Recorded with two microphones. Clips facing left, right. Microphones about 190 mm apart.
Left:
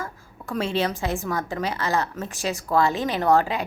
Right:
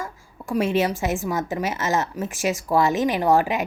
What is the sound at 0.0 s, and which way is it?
A woman's voice, 15° right (ahead or behind).